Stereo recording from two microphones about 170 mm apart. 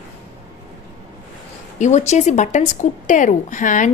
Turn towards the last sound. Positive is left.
turn(degrees=50)  # may be behind; listen again after turning